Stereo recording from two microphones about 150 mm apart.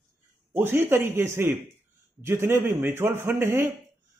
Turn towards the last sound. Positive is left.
turn(degrees=-15)  # may be behind; listen again after turning